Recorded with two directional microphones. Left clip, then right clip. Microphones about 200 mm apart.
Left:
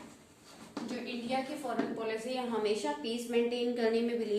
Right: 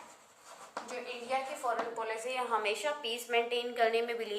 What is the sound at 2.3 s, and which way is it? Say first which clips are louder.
A woman's voice: right 1 dB; 40° right (ahead or behind).